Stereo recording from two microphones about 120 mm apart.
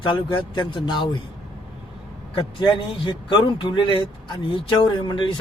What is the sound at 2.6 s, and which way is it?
A man's voice, 40° left (ahead or behind).